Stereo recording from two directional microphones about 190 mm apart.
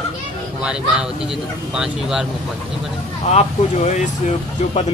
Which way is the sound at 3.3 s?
35° left (ahead or behind).